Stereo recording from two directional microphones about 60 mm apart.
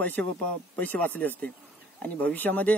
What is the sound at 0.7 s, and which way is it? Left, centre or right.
A man's voice, left.